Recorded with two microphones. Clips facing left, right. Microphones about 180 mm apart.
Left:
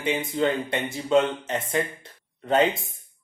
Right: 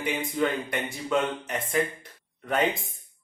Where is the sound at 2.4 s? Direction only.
25° left (ahead or behind).